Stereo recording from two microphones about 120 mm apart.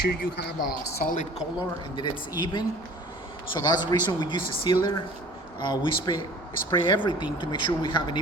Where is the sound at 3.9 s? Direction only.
40° left (ahead or behind).